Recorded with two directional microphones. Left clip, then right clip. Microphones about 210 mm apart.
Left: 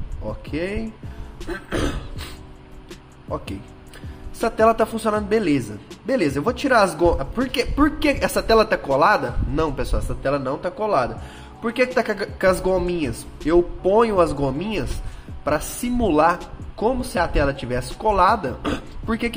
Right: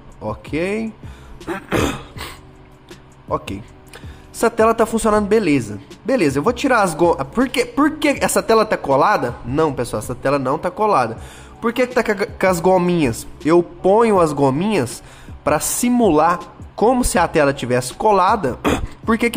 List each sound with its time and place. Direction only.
0.2 s speech: 20° right (ahead or behind)
3.3 s speech: 20° right (ahead or behind)